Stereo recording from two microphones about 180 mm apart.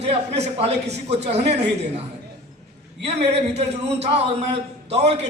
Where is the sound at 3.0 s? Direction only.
35° right (ahead or behind).